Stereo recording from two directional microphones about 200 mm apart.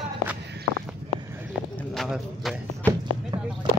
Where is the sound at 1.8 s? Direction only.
Centre (ahead or behind).